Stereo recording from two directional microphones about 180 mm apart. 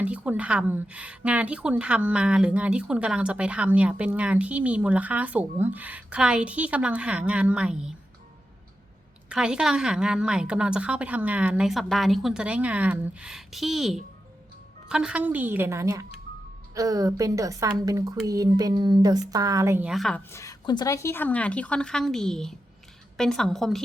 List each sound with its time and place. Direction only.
0.0 s speech: 10° right (ahead or behind)
9.3 s a woman's voice: 5° right (ahead or behind)
19.9 s a woman's voice: centre (ahead or behind)
20.3 s a woman's voice: 20° left (ahead or behind); by 23.8 s centre (ahead or behind)